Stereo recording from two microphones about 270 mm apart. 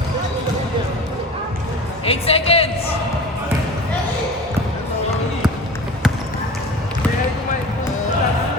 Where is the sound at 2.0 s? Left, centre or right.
Left.